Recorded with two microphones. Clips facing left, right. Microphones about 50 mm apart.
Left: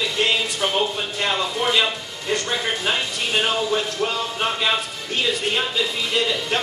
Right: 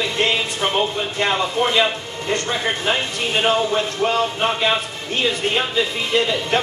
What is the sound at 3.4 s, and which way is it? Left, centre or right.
Speech, right.